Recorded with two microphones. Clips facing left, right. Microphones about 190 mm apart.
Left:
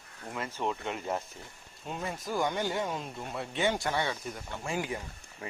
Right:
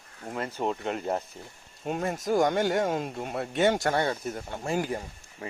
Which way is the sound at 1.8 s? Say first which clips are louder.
Right 7 dB; 55° right (ahead or behind).